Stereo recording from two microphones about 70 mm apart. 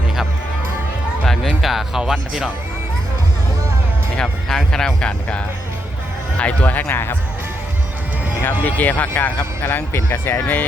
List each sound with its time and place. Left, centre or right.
1.2 s speech: centre
4.2 s speech: centre
6.4 s speech: left
8.6 s speech: left
10.4 s speech: left